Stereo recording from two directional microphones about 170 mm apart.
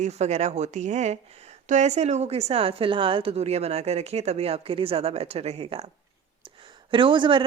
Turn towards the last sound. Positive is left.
turn(degrees=-30)  # may be behind; listen again after turning